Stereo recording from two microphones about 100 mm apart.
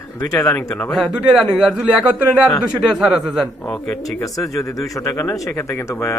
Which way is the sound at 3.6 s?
10° left (ahead or behind).